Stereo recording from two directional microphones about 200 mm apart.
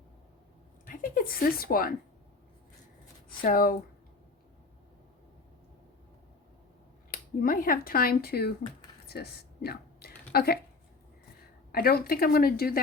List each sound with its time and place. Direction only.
0.9 s speech: 45° left (ahead or behind)
3.2 s speech: 45° left (ahead or behind)
7.1 s speech: 45° left (ahead or behind)
9.0 s a sound: 55° left (ahead or behind)
11.7 s speech: 50° left (ahead or behind)